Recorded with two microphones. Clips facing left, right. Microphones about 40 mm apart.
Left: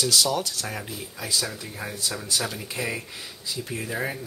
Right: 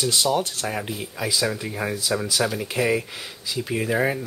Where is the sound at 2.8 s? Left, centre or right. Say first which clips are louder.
Right 8 dB; right.